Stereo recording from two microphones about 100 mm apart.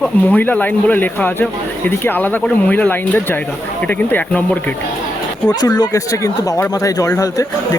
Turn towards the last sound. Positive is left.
turn(degrees=35)  # may be behind; listen again after turning